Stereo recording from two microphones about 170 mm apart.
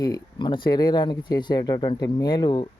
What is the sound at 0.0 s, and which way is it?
Speech, 25° left (ahead or behind).